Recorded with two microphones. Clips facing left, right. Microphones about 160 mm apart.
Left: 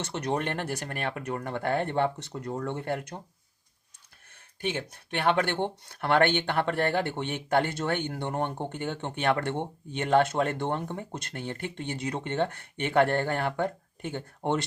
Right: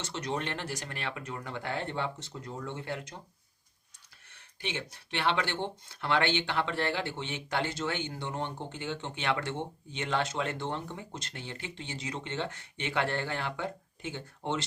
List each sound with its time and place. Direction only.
0.0 s speech: 55° left (ahead or behind)
4.6 s speech: 50° left (ahead or behind)